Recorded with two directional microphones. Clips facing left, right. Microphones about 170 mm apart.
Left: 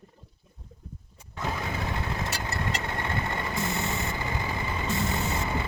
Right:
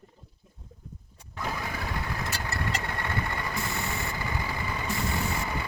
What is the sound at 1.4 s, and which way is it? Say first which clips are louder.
Vehicle: left 2 dB; 25° left (ahead or behind).